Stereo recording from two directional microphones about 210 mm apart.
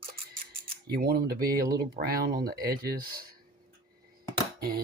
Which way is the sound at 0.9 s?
45° right (ahead or behind).